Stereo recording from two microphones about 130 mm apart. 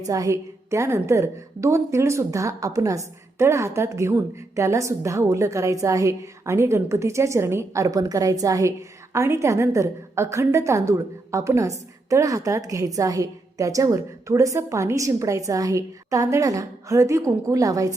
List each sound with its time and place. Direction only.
0.1 s a woman's voice: 25° right (ahead or behind)